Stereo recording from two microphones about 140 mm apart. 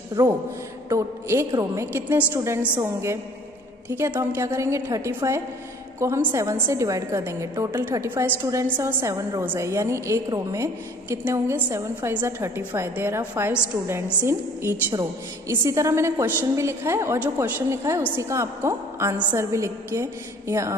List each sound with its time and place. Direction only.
0.2 s a woman's voice: 25° right (ahead or behind)